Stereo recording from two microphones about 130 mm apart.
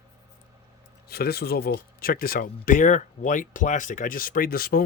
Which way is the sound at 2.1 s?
90° left.